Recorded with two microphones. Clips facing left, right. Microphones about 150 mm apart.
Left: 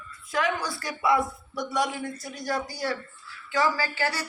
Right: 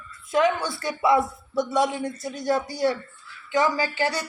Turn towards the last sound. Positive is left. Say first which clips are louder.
# right 4 dB
turn(degrees=-20)  # may be behind; listen again after turning